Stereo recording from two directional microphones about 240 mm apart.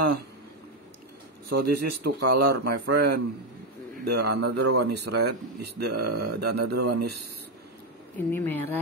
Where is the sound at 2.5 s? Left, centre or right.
Right.